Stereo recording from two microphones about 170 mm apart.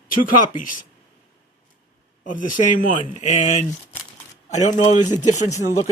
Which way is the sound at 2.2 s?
50° left (ahead or behind).